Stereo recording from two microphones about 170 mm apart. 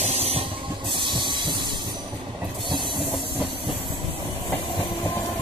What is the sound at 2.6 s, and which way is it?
Train, 30° right (ahead or behind).